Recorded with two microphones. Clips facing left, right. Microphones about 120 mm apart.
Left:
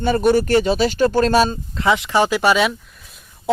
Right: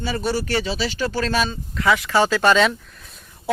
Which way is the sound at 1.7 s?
25° left (ahead or behind).